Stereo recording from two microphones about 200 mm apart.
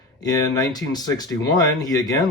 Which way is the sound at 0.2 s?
20° left (ahead or behind).